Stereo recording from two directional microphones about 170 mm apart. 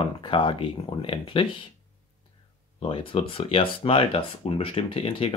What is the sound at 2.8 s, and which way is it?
Speech, 30° left (ahead or behind).